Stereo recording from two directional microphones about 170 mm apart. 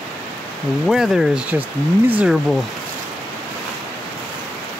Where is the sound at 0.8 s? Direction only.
Centre (ahead or behind).